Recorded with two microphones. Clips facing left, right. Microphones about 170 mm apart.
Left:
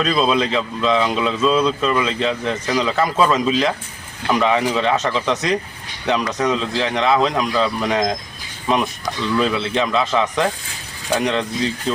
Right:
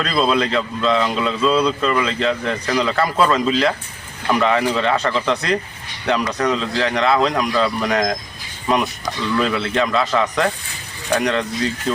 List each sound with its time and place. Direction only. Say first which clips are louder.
0.0 s speech: left 1 dB; 15° left (ahead or behind)
8.6 s speech: even; centre (ahead or behind)
9.4 s speech: right 1 dB; 15° left (ahead or behind)